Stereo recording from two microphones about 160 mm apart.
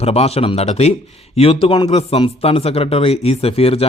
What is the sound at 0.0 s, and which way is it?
Speech, 40° left (ahead or behind).